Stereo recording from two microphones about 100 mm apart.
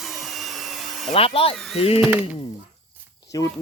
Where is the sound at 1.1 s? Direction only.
70° left (ahead or behind).